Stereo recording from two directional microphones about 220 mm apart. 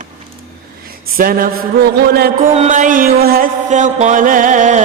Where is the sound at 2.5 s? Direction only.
35° right (ahead or behind).